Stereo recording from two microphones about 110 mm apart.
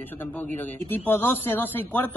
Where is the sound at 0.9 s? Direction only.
20° left (ahead or behind).